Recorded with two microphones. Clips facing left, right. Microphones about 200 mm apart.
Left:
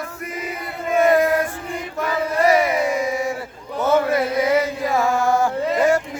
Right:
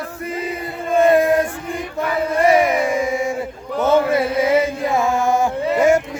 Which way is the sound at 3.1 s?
25° right (ahead or behind).